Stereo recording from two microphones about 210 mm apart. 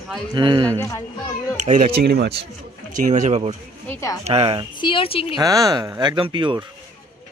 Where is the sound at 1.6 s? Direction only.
35° right (ahead or behind); by 2.4 s 50° right (ahead or behind).